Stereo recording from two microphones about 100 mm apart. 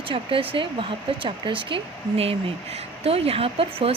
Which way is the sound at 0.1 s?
65° right (ahead or behind).